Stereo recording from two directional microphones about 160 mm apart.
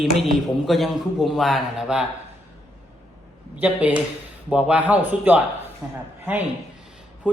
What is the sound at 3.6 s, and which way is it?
Speech, 10° right (ahead or behind).